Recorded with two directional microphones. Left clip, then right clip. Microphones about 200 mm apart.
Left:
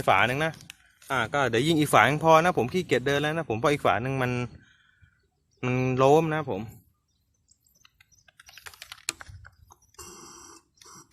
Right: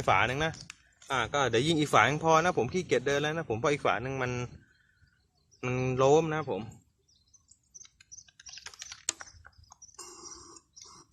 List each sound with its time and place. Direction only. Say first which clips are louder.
0.0 s speech: left 4 dB; 50° left (ahead or behind)
5.5 s speech: left 4 dB; 50° left (ahead or behind)
8.3 s typing: left 2 dB; 30° left (ahead or behind)